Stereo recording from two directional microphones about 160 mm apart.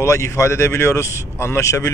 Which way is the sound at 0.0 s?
15° left (ahead or behind).